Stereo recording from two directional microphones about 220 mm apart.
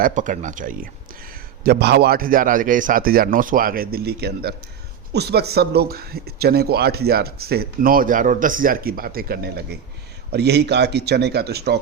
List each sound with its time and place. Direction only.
0.0 s a man's voice: 35° right (ahead or behind)